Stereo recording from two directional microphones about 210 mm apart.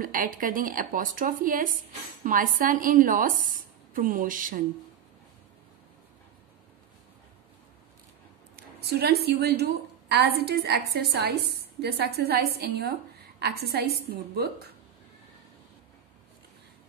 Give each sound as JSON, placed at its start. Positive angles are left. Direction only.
{"t": 0.0, "sound": "a woman's voice", "side_deg": -40}
{"t": 8.5, "sound": "a woman's voice", "side_deg": -50}